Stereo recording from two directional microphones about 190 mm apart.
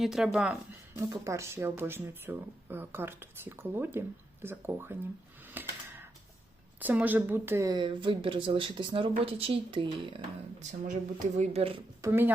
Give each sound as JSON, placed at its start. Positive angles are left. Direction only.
{"t": 0.0, "sound": "speech", "side_deg": 0}
{"t": 0.9, "sound": "speech", "side_deg": -15}
{"t": 5.6, "sound": "a sound", "side_deg": -10}
{"t": 6.7, "sound": "speech", "side_deg": -10}
{"t": 10.6, "sound": "speech", "side_deg": -40}
{"t": 12.0, "sound": "speech", "side_deg": -10}